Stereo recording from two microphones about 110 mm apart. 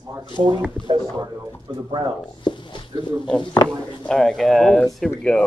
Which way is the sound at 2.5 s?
45° left (ahead or behind).